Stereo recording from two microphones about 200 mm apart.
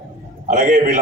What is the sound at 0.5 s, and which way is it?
Speech, 40° right (ahead or behind).